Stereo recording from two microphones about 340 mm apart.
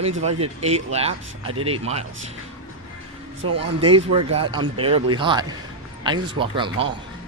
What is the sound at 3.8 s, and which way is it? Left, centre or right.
Speech, centre.